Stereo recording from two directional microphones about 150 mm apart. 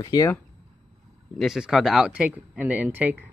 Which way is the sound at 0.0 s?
25° left (ahead or behind).